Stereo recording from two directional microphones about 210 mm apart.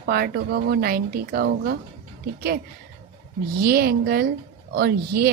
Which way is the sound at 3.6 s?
45° right (ahead or behind).